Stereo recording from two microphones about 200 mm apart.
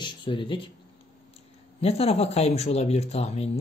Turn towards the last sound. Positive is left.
turn(degrees=30)  # may be behind; listen again after turning